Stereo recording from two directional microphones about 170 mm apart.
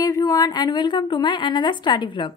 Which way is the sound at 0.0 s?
20° left (ahead or behind).